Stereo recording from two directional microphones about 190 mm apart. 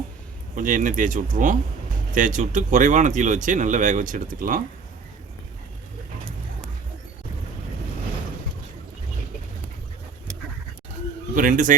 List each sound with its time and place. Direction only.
0.5 s speech: 40° right (ahead or behind)
11.3 s speech: 45° right (ahead or behind)